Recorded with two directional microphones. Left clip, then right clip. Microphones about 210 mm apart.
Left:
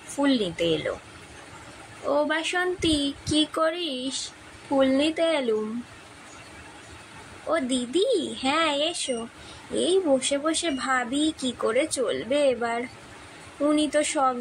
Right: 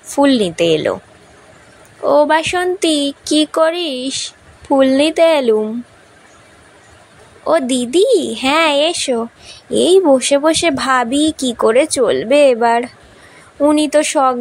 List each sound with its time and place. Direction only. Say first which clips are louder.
0.1 s speech: right 12 dB; 40° right (ahead or behind)
2.0 s speech: right 13 dB; 40° right (ahead or behind)
7.4 s speech: right 12 dB; 40° right (ahead or behind)